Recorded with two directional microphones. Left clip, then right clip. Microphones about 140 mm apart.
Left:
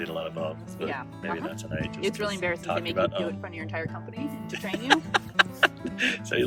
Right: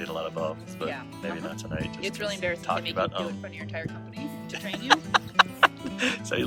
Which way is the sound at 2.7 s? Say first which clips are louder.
Left 1 dB; 15° right (ahead or behind).